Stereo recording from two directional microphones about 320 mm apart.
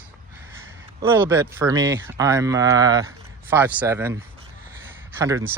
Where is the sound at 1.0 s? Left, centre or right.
Centre.